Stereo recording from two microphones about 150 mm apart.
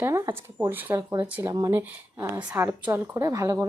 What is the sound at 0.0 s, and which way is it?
A woman's voice, 20° right (ahead or behind).